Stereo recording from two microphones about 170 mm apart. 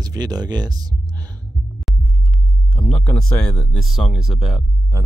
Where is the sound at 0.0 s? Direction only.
25° right (ahead or behind).